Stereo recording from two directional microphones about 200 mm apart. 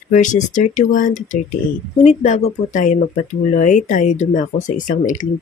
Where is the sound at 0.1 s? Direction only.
40° left (ahead or behind).